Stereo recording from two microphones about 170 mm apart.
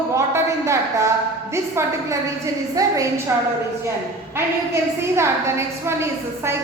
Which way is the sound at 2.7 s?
20° right (ahead or behind).